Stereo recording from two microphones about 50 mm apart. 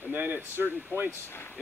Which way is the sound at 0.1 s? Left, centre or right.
Right.